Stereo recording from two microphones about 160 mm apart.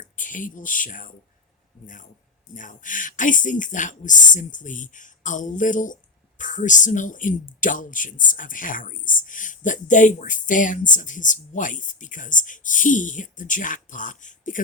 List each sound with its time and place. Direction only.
0.0 s speech: 55° left (ahead or behind)
2.6 s speech: 55° left (ahead or behind)